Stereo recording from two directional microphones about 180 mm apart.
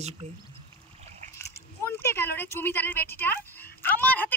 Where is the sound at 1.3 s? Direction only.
15° left (ahead or behind).